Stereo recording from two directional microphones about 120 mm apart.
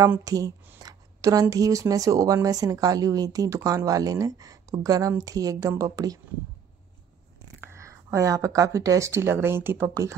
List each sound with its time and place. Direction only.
0.2 s speech: 30° right (ahead or behind)
7.6 s speech: 25° right (ahead or behind)